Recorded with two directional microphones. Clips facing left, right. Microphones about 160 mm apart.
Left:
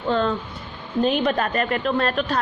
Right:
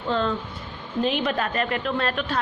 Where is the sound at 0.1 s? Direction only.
50° left (ahead or behind).